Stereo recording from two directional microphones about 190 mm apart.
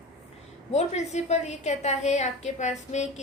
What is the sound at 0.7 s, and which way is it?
A woman's voice, 35° left (ahead or behind).